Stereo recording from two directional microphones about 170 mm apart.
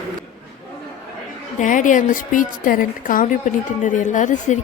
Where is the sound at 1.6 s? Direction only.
50° left (ahead or behind).